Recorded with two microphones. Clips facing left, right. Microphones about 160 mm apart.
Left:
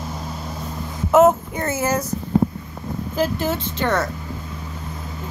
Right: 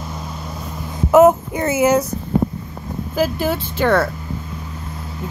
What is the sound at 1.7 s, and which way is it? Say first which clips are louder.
Speech: right 7 dB; 15° right (ahead or behind).